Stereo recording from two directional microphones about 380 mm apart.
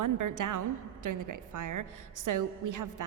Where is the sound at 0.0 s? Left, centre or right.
Right.